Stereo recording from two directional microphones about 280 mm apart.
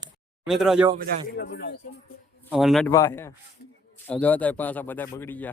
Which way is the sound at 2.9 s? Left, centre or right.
Centre.